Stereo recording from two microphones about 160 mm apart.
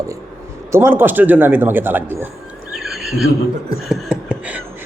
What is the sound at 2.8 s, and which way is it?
Neigh, centre (ahead or behind).